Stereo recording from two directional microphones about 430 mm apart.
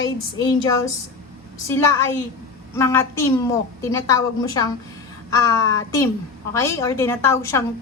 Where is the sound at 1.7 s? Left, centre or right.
Centre.